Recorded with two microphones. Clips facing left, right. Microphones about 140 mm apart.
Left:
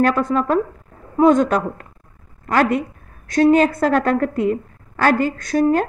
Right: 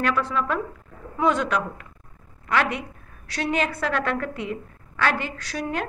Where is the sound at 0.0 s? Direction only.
45° left (ahead or behind).